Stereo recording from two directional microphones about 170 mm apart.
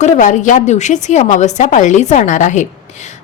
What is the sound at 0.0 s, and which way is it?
A woman's voice, 50° left (ahead or behind).